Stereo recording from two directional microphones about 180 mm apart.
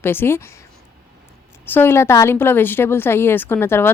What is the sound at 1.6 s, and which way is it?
Speech, 10° left (ahead or behind).